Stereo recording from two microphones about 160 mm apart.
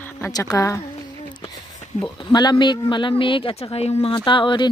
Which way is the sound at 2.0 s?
25° left (ahead or behind).